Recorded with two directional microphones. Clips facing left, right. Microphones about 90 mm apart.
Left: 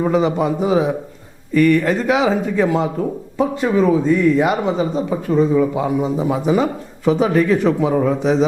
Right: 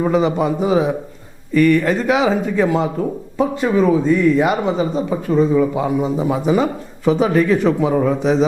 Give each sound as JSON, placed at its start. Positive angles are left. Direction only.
{"t": 0.0, "sound": "speech", "side_deg": -20}